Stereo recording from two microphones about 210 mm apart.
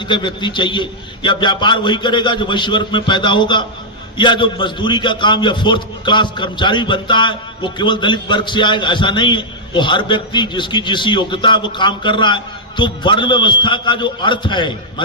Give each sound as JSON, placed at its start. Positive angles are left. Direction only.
{"t": 0.1, "sound": "a man's voice", "side_deg": 20}